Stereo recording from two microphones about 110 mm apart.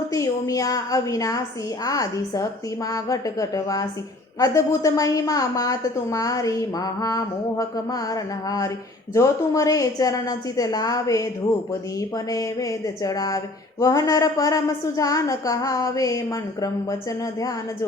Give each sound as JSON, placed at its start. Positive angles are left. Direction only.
{"t": 0.1, "sound": "speech", "side_deg": 30}